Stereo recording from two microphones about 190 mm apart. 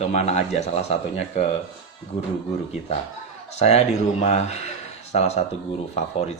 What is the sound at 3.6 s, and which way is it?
A man's voice, 35° left (ahead or behind).